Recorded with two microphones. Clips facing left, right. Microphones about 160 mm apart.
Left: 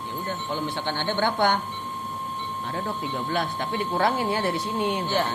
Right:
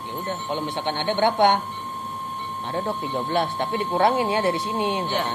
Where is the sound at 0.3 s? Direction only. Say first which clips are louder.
Right 2 dB; 20° right (ahead or behind).